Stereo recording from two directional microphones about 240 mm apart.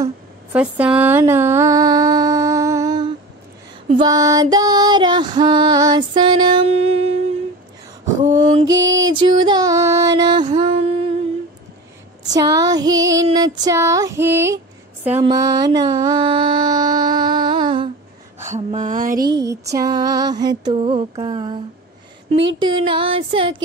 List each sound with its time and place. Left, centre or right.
0.0 s a sound: centre
3.9 s music: centre
8.2 s a sound: centre
8.6 s music: centre
12.3 s music: centre
15.0 s mantra: centre
18.4 s speech: right
19.3 s music: centre
22.6 s a sound: right